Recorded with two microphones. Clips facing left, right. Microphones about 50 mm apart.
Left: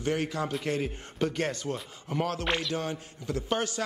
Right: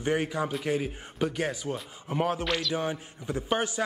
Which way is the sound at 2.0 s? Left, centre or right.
Centre.